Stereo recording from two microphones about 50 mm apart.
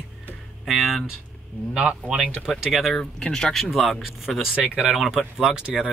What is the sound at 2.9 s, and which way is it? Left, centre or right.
A man's voice, centre.